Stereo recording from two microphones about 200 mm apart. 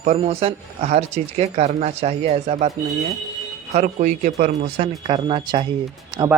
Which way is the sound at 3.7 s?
35° right (ahead or behind).